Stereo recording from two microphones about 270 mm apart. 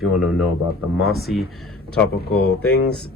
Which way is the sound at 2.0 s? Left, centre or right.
Left.